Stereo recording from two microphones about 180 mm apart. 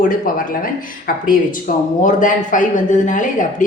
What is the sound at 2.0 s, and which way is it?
A woman's voice, 45° left (ahead or behind).